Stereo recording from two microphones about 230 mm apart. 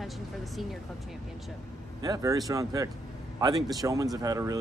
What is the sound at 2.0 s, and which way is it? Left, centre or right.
A man's voice, centre.